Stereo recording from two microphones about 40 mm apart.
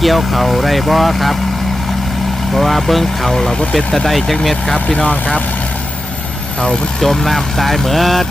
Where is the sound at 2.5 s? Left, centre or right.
Centre.